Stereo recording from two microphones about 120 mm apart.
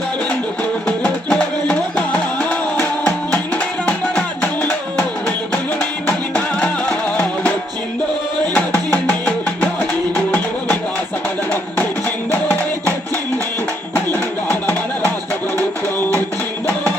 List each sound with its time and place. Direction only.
1.0 s music: 5° left (ahead or behind)
5.8 s music: 15° left (ahead or behind)
8.5 s music: 15° left (ahead or behind)
13.9 s music: 15° left (ahead or behind)